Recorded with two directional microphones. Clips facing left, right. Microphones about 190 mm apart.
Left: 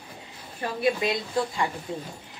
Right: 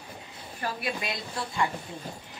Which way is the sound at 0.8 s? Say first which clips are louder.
Left 9 dB; 25° left (ahead or behind).